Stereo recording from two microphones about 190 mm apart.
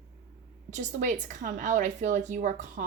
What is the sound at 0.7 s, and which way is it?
A woman's voice, 40° right (ahead or behind).